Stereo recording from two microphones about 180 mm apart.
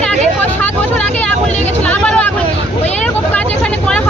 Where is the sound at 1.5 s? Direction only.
40° left (ahead or behind).